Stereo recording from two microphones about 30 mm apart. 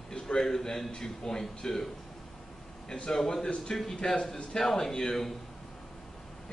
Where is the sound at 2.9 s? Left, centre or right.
Left.